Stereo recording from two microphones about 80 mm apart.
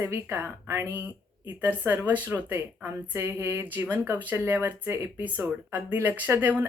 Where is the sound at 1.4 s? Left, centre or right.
Right.